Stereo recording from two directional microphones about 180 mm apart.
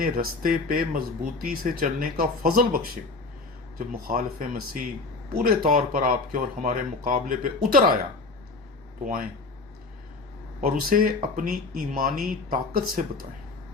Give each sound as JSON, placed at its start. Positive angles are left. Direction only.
{"t": 0.0, "sound": "speech", "side_deg": -55}
{"t": 9.0, "sound": "speech", "side_deg": -50}
{"t": 10.6, "sound": "speech", "side_deg": -55}